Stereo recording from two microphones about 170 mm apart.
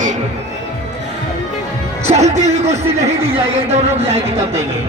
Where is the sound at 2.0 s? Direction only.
40° right (ahead or behind).